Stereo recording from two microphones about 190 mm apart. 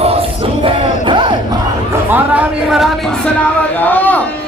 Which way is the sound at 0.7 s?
25° right (ahead or behind).